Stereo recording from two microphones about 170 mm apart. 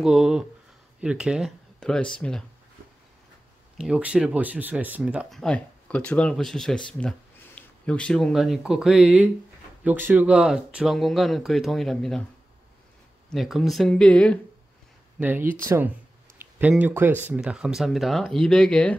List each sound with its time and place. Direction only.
0.0 s speech: 5° right (ahead or behind)
1.8 s speech: 5° left (ahead or behind)
3.7 s speech: 5° right (ahead or behind)
5.4 s speech: 5° left (ahead or behind)
13.3 s speech: centre (ahead or behind)
15.1 s speech: 10° right (ahead or behind); by 18.9 s 5° left (ahead or behind)